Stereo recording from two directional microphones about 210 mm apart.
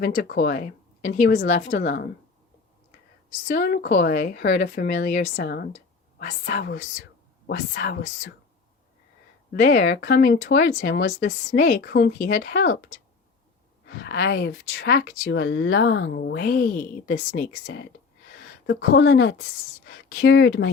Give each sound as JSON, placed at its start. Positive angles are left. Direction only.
{"t": 0.0, "sound": "speech", "side_deg": 45}
{"t": 3.4, "sound": "speech", "side_deg": 40}
{"t": 6.1, "sound": "speech", "side_deg": 40}
{"t": 9.5, "sound": "speech", "side_deg": 40}
{"t": 13.8, "sound": "speech", "side_deg": 50}